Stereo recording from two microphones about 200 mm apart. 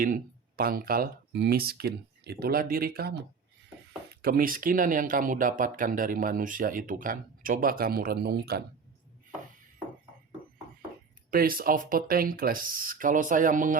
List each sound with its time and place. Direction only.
0.0 s speech: 45° right (ahead or behind)
11.3 s speech: 45° right (ahead or behind)